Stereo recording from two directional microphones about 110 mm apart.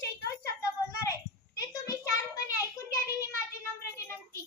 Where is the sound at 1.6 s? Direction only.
30° left (ahead or behind).